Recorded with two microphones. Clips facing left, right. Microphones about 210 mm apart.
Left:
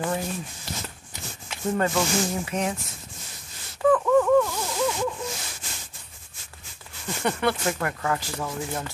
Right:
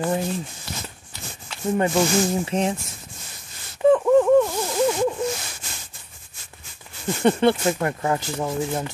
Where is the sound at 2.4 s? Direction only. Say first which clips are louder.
Right 4 dB; 30° right (ahead or behind).